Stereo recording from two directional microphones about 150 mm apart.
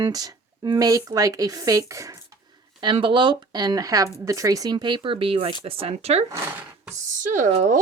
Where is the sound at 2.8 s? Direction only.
35° right (ahead or behind).